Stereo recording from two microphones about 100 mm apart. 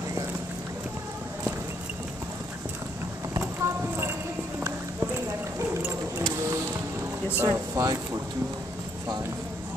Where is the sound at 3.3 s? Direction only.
25° right (ahead or behind).